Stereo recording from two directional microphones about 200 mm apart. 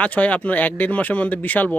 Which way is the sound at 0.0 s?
5° left (ahead or behind).